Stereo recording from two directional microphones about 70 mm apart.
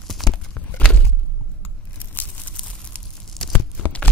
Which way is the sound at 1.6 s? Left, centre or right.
Left.